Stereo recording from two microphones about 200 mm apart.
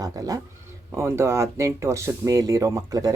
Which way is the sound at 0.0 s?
15° right (ahead or behind).